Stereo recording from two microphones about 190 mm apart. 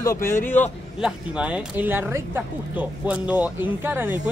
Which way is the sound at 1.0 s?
5° right (ahead or behind).